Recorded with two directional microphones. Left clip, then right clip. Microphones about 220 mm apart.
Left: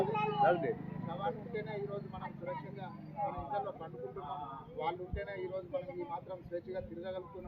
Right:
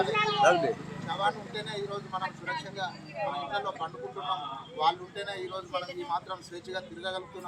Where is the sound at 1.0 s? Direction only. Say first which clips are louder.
Right 9 dB; 20° right (ahead or behind).